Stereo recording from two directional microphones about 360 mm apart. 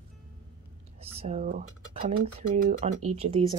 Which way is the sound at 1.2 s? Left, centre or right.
Centre.